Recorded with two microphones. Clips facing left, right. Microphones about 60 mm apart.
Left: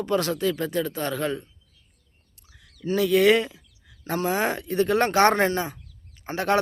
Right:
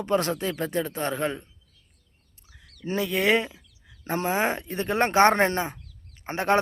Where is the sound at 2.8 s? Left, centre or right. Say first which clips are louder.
Left 5 dB; right.